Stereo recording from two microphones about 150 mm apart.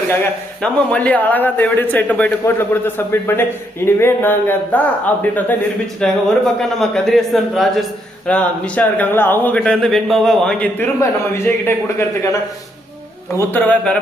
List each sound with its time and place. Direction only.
0.6 s a man's voice: 10° left (ahead or behind)
13.5 s a man's voice: 10° left (ahead or behind)